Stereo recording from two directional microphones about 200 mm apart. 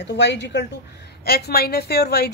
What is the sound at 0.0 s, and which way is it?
A woman's voice, 60° left (ahead or behind).